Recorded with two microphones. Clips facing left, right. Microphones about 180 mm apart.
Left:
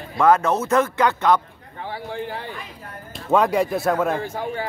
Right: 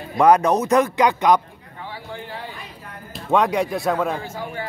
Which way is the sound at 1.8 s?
55° left (ahead or behind).